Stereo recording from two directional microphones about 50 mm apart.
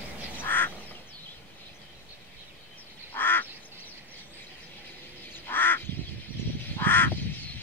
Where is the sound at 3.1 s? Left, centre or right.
Left.